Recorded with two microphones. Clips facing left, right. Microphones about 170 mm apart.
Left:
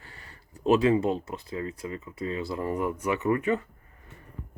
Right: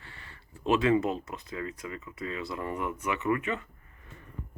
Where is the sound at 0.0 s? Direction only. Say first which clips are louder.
Left 1 dB; 40° left (ahead or behind).